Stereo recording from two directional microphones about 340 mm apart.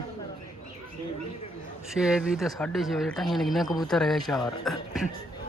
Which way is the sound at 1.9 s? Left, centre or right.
Centre.